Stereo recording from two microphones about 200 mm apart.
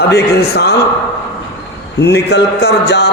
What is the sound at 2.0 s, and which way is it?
A man's voice, 55° left (ahead or behind).